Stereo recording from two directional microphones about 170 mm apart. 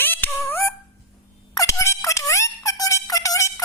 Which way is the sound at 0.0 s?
10° left (ahead or behind).